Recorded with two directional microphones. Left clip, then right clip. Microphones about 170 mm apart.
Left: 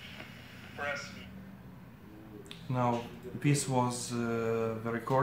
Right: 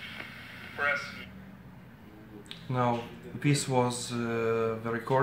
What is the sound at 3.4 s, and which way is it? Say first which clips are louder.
Speech: right 3 dB; 20° right (ahead or behind).